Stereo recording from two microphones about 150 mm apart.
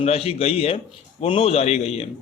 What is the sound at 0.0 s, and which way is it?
A man's voice, 40° left (ahead or behind).